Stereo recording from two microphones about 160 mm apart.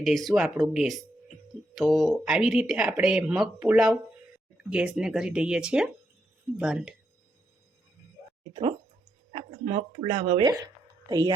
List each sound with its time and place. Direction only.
0.0 s speech: centre (ahead or behind)
9.3 s a woman's voice: 40° right (ahead or behind)